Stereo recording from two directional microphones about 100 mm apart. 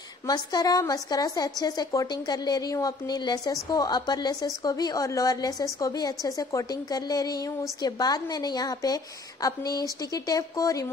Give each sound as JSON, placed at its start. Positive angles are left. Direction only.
{"t": 0.3, "sound": "a woman's voice", "side_deg": 40}